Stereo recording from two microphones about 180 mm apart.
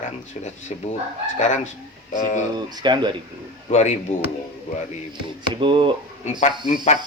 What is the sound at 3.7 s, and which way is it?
Speech, 40° left (ahead or behind).